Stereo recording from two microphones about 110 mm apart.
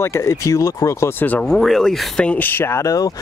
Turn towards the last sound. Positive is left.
turn(degrees=30)  # may be behind; listen again after turning